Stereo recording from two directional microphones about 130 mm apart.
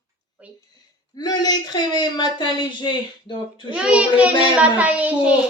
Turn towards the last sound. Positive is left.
turn(degrees=-10)  # may be behind; listen again after turning